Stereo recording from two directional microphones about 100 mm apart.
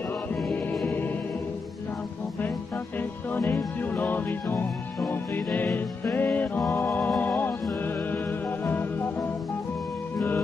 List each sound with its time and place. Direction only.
0.8 s music: 20° left (ahead or behind)
3.0 s music: 20° left (ahead or behind)
10.1 s music: 20° left (ahead or behind)